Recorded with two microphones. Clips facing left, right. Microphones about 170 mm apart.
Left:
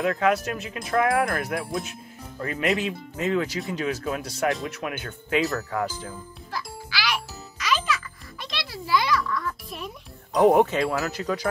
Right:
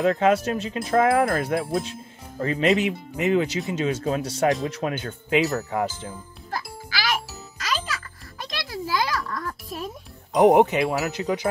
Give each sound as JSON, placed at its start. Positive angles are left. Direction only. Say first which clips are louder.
{"t": 0.0, "sound": "speech", "louder": "right 3 dB", "side_deg": -25}
{"t": 6.5, "sound": "music", "louder": "right 2 dB", "side_deg": -45}
{"t": 10.3, "sound": "speech", "louder": "right 2 dB", "side_deg": -20}